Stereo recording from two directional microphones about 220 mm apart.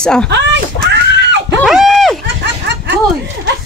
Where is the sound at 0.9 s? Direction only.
50° right (ahead or behind).